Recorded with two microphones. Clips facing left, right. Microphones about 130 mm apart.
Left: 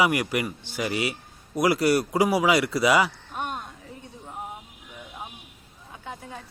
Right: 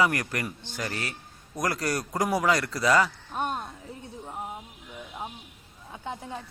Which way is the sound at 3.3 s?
35° right (ahead or behind).